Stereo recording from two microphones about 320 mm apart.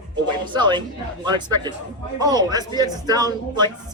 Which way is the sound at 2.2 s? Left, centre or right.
Centre.